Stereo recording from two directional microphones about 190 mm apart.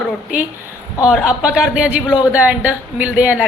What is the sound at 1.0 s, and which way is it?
Speech, 5° right (ahead or behind).